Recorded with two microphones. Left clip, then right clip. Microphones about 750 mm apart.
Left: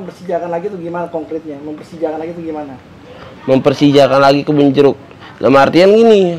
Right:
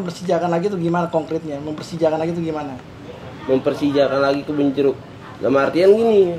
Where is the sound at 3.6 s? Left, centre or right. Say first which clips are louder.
Left 10 dB; left.